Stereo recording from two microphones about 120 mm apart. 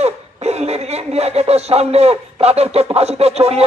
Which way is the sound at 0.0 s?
65° right (ahead or behind).